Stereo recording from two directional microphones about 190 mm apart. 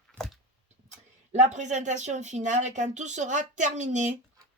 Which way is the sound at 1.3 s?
40° right (ahead or behind).